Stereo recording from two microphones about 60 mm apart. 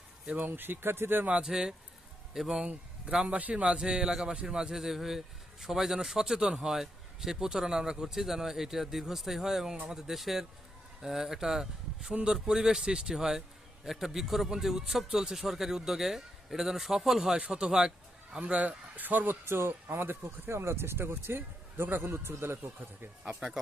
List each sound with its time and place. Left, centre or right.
0.3 s a man's voice: right
1.3 s speech: centre
3.2 s speech: right
10.1 s speech: centre
18.3 s a man's voice: right